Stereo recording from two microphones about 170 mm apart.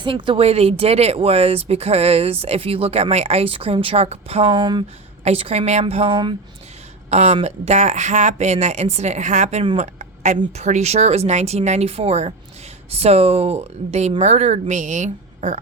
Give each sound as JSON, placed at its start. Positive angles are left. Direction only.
{"t": 0.0, "sound": "speech", "side_deg": -30}
{"t": 7.1, "sound": "speech", "side_deg": -40}